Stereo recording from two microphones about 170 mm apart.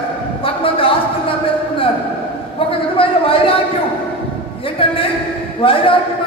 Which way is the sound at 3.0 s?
30° left (ahead or behind).